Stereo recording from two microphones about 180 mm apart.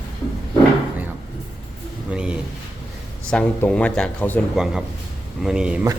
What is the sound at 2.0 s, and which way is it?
Speech, 5° right (ahead or behind).